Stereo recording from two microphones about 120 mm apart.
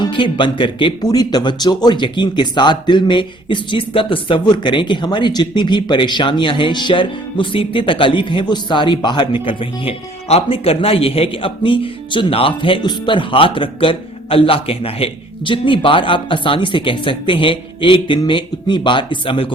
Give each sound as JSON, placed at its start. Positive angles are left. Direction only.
{"t": 0.1, "sound": "speech", "side_deg": 45}